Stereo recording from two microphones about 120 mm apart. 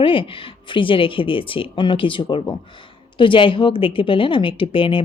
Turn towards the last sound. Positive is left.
turn(degrees=45)  # may be behind; listen again after turning